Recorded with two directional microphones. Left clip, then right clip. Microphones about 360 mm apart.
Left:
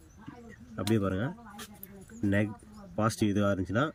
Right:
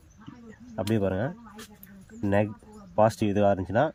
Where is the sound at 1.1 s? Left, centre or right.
Centre.